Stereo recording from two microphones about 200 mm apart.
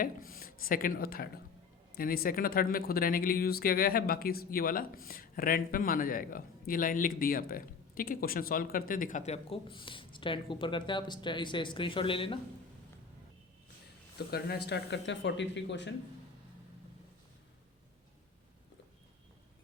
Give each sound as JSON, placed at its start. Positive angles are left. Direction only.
{"t": 0.0, "sound": "speech", "side_deg": 45}
{"t": 14.2, "sound": "speech", "side_deg": 50}